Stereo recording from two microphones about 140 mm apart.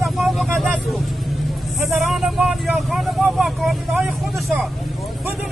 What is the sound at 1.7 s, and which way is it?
Vehicle, centre (ahead or behind).